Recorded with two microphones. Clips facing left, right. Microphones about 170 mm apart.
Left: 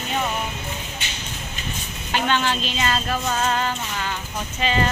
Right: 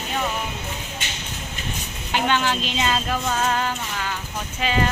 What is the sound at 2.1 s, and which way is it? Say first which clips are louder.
A woman's voice: even; 10° right (ahead or behind).